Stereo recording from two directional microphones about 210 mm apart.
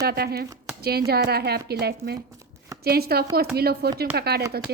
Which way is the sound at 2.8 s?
50° right (ahead or behind).